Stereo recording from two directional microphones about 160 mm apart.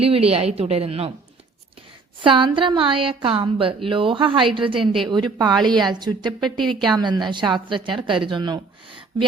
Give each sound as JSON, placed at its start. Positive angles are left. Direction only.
{"t": 0.0, "sound": "a woman's voice", "side_deg": -40}
{"t": 2.2, "sound": "a woman's voice", "side_deg": -30}
{"t": 5.5, "sound": "a woman's voice", "side_deg": 0}
{"t": 5.9, "sound": "a woman's voice", "side_deg": -25}
{"t": 6.4, "sound": "a woman's voice", "side_deg": 0}
{"t": 6.8, "sound": "a woman's voice", "side_deg": -25}